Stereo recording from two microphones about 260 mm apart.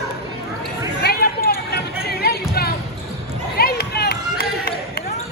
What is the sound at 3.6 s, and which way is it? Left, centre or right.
Run, left.